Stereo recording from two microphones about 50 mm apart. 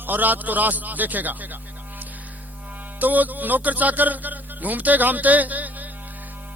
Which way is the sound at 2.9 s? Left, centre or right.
Right.